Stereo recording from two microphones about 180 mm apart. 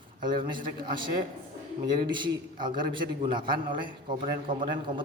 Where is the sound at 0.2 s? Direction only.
25° right (ahead or behind).